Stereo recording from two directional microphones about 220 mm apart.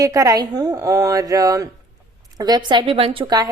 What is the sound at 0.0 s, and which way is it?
Speech, 15° right (ahead or behind).